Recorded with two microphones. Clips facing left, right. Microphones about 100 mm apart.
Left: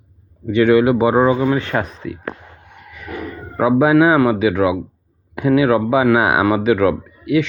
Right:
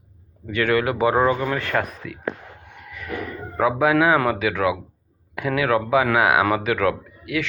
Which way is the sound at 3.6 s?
20° left (ahead or behind).